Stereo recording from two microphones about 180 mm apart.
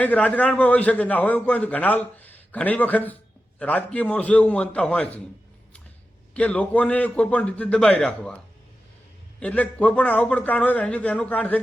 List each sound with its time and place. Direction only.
0.0 s a man's voice: 10° left (ahead or behind)
6.3 s a man's voice: 5° left (ahead or behind)
9.4 s a man's voice: 10° left (ahead or behind)